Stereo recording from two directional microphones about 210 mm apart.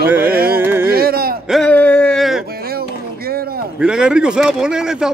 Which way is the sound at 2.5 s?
45° right (ahead or behind).